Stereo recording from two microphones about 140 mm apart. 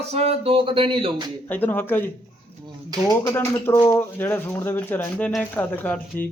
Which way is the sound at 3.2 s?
20° left (ahead or behind).